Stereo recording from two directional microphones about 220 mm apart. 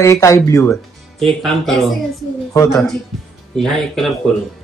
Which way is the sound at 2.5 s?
10° left (ahead or behind).